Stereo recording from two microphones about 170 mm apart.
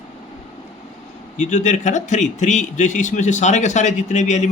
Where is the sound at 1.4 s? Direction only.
45° left (ahead or behind).